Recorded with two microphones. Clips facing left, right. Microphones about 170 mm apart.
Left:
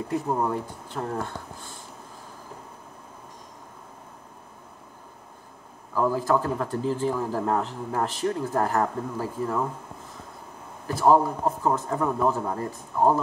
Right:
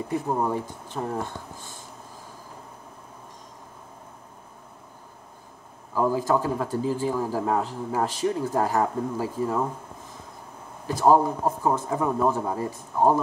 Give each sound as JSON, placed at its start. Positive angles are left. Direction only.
{"t": 0.3, "sound": "speech", "side_deg": -10}
{"t": 5.9, "sound": "speech", "side_deg": -15}
{"t": 10.9, "sound": "speech", "side_deg": -15}